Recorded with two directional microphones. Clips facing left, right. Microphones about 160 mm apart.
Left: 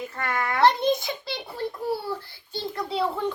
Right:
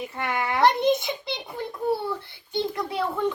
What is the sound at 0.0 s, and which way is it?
A child's voice, 15° right (ahead or behind).